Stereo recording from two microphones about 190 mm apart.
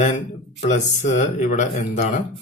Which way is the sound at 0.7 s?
35° left (ahead or behind).